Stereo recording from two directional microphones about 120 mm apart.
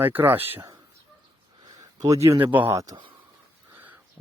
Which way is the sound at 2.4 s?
15° right (ahead or behind).